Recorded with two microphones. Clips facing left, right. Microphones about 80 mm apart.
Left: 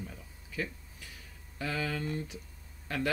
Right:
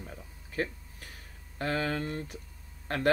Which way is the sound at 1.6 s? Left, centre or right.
Right.